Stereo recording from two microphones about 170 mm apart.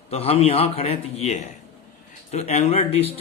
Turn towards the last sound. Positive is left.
turn(degrees=35)  # may be behind; listen again after turning